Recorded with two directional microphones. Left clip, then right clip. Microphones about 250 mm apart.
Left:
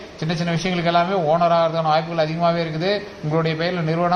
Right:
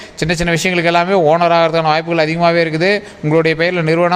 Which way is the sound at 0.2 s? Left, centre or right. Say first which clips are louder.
Right 9 dB; right.